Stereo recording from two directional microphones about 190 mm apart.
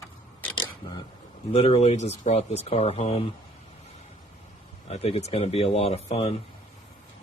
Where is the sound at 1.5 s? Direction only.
30° left (ahead or behind).